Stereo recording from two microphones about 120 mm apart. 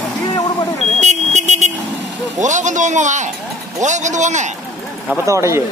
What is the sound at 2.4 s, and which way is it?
A man's voice, 90° right.